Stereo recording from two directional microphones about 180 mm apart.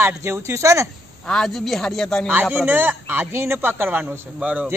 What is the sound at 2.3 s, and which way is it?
A man's voice, 10° right (ahead or behind).